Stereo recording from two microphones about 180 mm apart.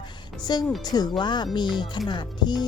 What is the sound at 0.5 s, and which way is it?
A woman's voice, 25° left (ahead or behind).